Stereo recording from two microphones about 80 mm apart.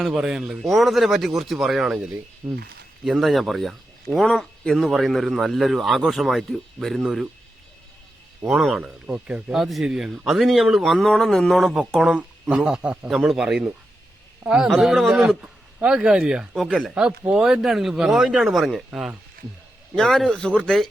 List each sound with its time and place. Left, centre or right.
0.0 s speech: centre
2.4 s speech: right
3.0 s speech: centre
8.4 s speech: centre
9.6 s speech: centre
13.1 s speech: centre
20.0 s speech: centre